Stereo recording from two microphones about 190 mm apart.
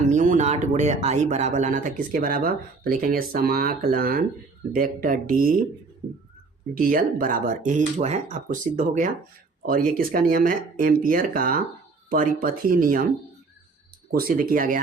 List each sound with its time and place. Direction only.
0.1 s speech: 40° right (ahead or behind)
6.7 s speech: 45° right (ahead or behind)
14.1 s speech: 50° right (ahead or behind)